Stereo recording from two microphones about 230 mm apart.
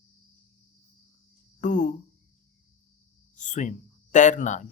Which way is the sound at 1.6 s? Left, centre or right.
Left.